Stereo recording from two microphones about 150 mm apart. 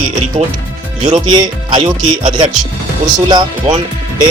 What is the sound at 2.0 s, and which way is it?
Speech, 60° right (ahead or behind).